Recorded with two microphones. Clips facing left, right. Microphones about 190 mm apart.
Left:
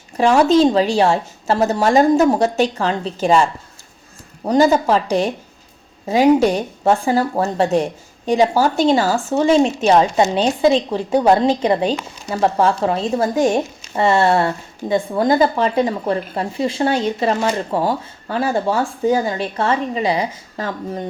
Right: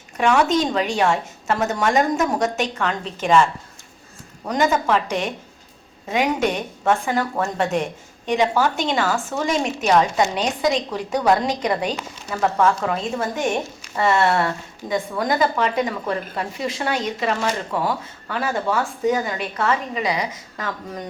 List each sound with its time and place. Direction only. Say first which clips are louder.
0.2 s a woman's voice: left 6 dB; 30° left (ahead or behind)